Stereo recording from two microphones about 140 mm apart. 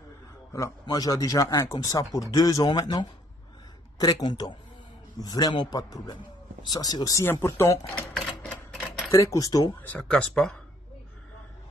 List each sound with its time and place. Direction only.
0.5 s speech: 20° left (ahead or behind)
9.1 s speech: 20° left (ahead or behind)
9.8 s speech: 10° left (ahead or behind)